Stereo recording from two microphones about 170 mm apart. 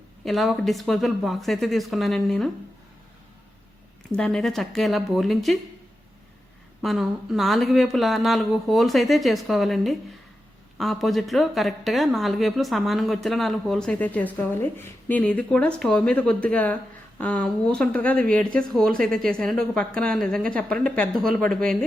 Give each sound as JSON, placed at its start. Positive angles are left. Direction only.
{"t": 0.3, "sound": "speech", "side_deg": 0}
{"t": 4.2, "sound": "speech", "side_deg": 0}
{"t": 6.8, "sound": "speech", "side_deg": 0}